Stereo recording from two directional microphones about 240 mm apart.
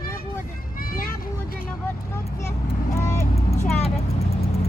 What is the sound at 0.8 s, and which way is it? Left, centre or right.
Vehicle, left.